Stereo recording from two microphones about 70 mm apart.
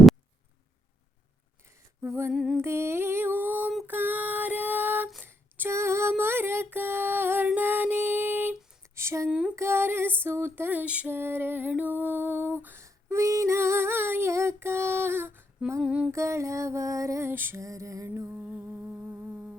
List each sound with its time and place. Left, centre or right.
2.3 s music: centre
2.6 s mantra: right
3.8 s a sound: right
9.0 s a sound: right
9.6 s female singing: right
10.7 s a sound: right
11.1 s lullaby: right
11.7 s female singing: right
15.8 s a sound: centre
16.1 s music: right
17.2 s music: right
17.6 s music: right
18.5 s humming: right